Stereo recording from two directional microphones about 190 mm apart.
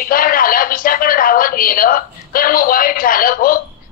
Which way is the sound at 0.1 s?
50° left (ahead or behind).